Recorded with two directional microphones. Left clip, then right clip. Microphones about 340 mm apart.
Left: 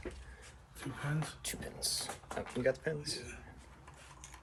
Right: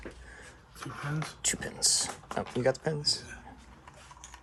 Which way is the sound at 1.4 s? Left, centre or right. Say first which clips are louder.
Right 10 dB; right.